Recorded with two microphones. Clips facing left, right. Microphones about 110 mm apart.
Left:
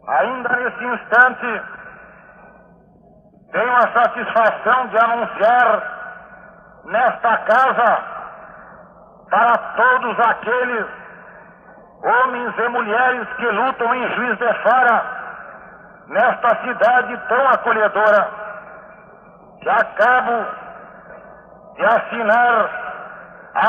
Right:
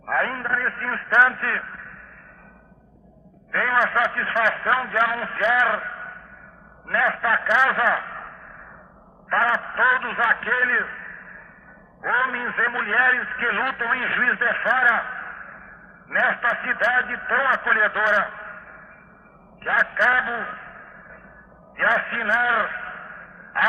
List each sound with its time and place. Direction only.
0.0 s a man's voice: 35° left (ahead or behind)
3.5 s a man's voice: 40° left (ahead or behind)
19.6 s a sound: 40° left (ahead or behind)